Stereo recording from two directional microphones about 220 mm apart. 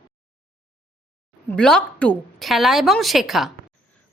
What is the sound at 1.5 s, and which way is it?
Speech, 5° left (ahead or behind).